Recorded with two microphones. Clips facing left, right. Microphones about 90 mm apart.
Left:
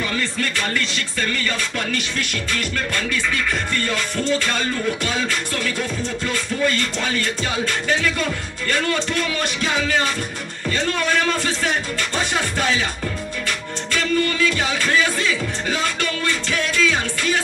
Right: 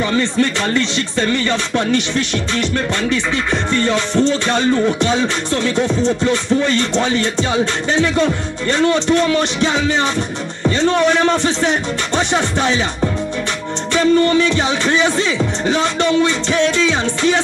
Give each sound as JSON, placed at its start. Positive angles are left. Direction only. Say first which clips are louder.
{"t": 0.1, "sound": "music", "louder": "right 8 dB", "side_deg": -25}
{"t": 13.9, "sound": "music", "louder": "right 8 dB", "side_deg": -30}